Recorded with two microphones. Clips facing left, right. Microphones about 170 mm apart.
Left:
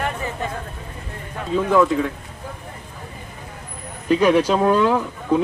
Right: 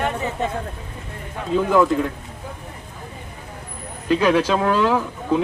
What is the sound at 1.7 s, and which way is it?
Speech, centre (ahead or behind).